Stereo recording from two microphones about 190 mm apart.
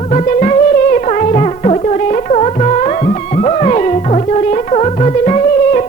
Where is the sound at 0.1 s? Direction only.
40° left (ahead or behind).